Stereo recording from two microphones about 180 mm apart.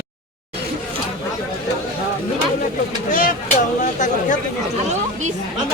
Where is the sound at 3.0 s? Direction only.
45° left (ahead or behind).